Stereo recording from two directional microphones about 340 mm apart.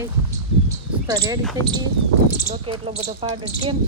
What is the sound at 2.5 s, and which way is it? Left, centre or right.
Speech, centre.